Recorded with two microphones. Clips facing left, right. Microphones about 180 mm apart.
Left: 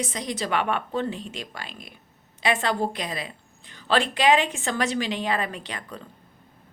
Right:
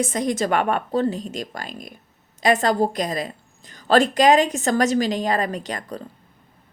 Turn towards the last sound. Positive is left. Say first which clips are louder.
# right 7 dB
turn(degrees=-40)  # may be behind; listen again after turning